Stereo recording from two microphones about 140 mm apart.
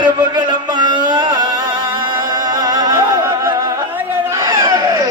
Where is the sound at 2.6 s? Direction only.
25° right (ahead or behind).